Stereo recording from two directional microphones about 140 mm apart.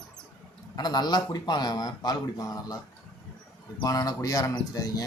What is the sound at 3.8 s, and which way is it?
Speech, 25° left (ahead or behind).